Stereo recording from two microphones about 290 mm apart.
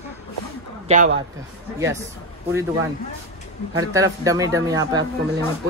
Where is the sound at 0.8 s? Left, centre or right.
Right.